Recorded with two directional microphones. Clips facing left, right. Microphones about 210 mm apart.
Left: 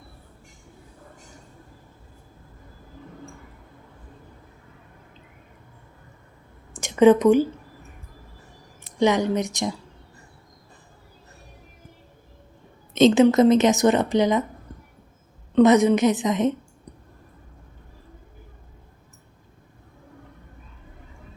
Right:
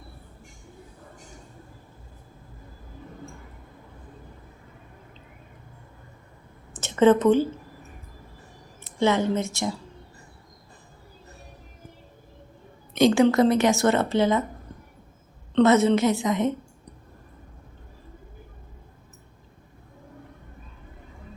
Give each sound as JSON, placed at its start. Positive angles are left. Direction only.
{"t": 6.7, "sound": "a sound", "side_deg": 15}
{"t": 9.0, "sound": "a woman's voice", "side_deg": 15}
{"t": 12.9, "sound": "a woman's voice", "side_deg": 20}
{"t": 15.5, "sound": "a woman's voice", "side_deg": 15}